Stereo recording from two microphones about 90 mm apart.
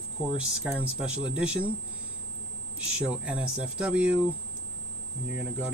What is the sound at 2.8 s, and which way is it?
Speech, 10° right (ahead or behind).